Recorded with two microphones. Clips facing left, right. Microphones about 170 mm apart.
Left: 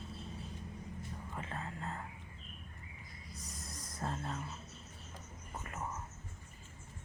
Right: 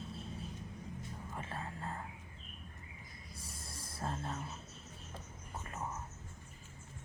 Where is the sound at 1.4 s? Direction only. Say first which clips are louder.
Even; 25° right (ahead or behind).